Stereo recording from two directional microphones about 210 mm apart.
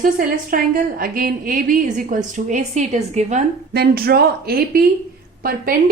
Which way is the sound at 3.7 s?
50° right (ahead or behind).